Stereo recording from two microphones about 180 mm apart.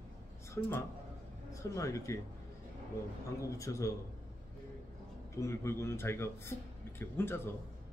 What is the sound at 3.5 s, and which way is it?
Speech, 15° left (ahead or behind).